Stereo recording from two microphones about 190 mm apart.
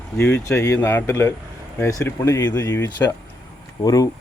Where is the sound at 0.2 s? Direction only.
10° left (ahead or behind).